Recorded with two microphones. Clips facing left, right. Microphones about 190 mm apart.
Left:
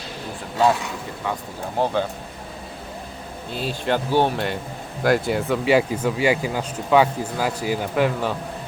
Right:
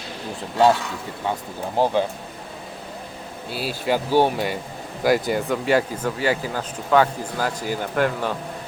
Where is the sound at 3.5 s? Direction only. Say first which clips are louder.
Even; 5° right (ahead or behind).